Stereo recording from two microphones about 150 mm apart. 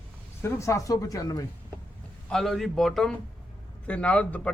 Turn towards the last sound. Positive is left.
turn(degrees=10)  # may be behind; listen again after turning